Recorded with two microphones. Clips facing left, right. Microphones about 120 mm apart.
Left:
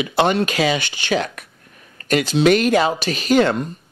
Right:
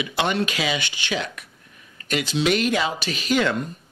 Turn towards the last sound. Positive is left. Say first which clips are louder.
# left 6 dB
turn(degrees=40)  # may be behind; listen again after turning